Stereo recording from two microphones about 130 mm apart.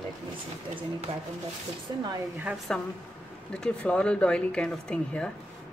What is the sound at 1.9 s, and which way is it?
Speech, 30° right (ahead or behind).